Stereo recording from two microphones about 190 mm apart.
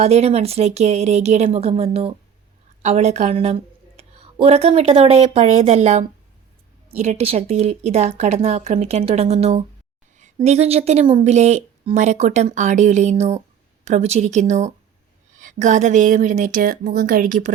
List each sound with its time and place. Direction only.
0.0 s a woman's voice: 35° right (ahead or behind)